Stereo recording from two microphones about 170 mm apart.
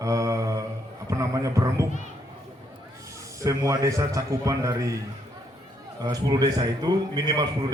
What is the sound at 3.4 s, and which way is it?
A man's voice, 20° right (ahead or behind).